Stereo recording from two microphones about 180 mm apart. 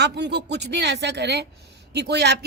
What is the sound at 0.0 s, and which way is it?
Speech, 70° right (ahead or behind).